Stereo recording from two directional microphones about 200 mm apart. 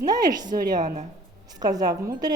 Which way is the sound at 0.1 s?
20° right (ahead or behind).